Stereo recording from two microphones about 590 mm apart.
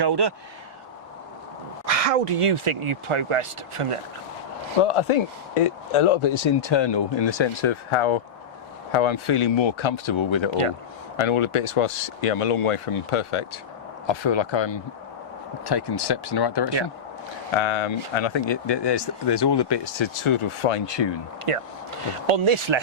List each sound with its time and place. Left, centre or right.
0.0 s speech: right
1.9 s speech: right
4.8 s speech: left
17.6 s speech: left
21.5 s speech: right